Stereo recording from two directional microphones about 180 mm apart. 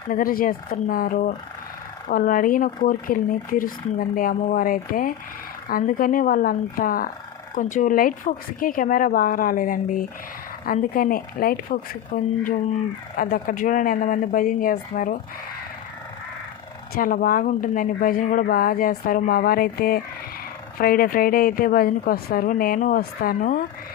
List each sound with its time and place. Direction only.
0.1 s a woman's voice: 50° left (ahead or behind)
16.9 s a woman's voice: 50° left (ahead or behind)